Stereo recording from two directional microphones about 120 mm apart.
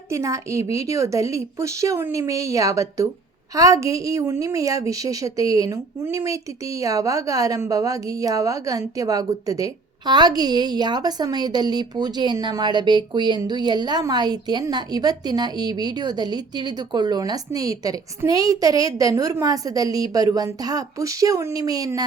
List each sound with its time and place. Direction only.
0.1 s a woman's voice: 25° right (ahead or behind)